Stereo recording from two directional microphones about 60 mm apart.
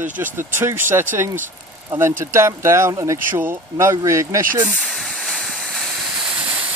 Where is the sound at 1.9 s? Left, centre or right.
Right.